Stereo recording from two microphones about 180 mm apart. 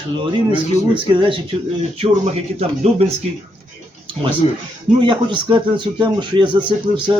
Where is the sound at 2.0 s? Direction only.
35° right (ahead or behind).